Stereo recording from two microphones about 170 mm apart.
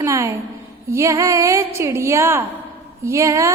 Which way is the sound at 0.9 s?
15° right (ahead or behind).